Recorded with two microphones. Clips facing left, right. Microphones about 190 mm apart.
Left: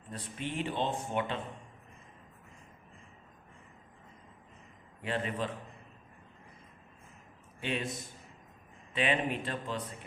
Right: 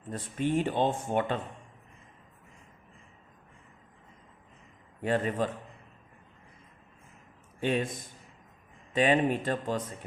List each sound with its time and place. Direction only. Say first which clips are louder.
0.1 s speech: right 10 dB; 45° right (ahead or behind)
5.0 s speech: right 6 dB; 45° right (ahead or behind)
7.6 s speech: right 7 dB; 45° right (ahead or behind)
8.9 s speech: right 6 dB; 45° right (ahead or behind)